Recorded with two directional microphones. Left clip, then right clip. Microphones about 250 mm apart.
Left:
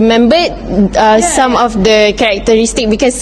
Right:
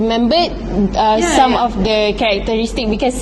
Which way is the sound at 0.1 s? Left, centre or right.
Left.